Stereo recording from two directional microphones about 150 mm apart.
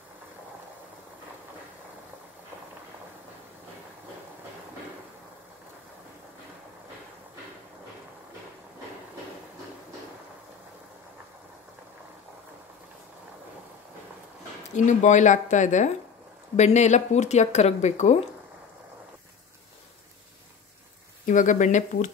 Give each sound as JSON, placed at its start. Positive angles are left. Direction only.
{"t": 14.7, "sound": "speech", "side_deg": 55}
{"t": 21.3, "sound": "speech", "side_deg": 55}